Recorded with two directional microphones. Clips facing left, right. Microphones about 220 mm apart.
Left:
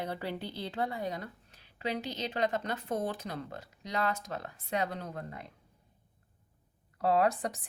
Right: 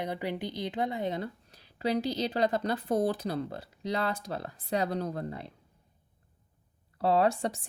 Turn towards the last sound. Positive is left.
turn(degrees=-30)  # may be behind; listen again after turning